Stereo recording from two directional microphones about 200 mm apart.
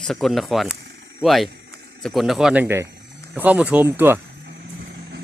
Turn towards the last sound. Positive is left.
turn(degrees=-10)  # may be behind; listen again after turning